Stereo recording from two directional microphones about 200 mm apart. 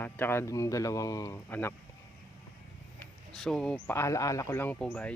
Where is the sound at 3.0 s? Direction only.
Centre (ahead or behind).